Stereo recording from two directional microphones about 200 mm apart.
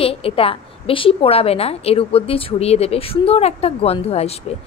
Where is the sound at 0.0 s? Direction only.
30° left (ahead or behind).